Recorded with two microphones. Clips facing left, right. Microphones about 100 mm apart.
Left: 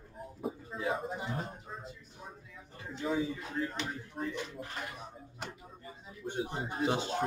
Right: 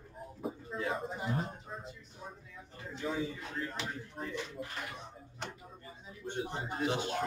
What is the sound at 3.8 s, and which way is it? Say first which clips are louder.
Speech: left 2 dB; centre (ahead or behind).